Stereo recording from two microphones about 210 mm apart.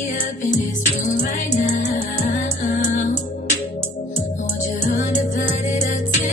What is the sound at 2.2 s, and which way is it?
Music, 35° left (ahead or behind).